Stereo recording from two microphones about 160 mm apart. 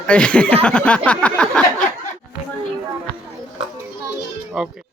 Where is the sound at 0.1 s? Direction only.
5° left (ahead or behind).